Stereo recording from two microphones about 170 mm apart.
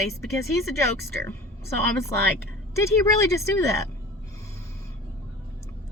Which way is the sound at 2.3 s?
15° left (ahead or behind).